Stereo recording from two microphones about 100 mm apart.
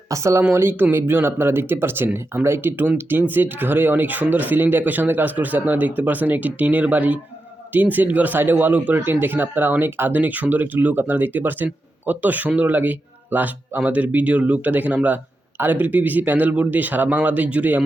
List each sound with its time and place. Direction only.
0.1 s speech: 30° right (ahead or behind); by 17.8 s 15° right (ahead or behind)